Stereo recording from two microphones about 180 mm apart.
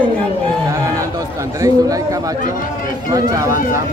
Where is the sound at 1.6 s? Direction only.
20° right (ahead or behind).